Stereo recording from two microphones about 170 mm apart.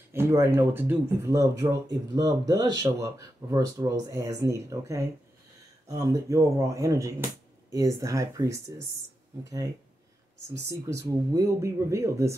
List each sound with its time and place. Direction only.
0.1 s speech: 15° right (ahead or behind)
10.7 s speech: 15° right (ahead or behind)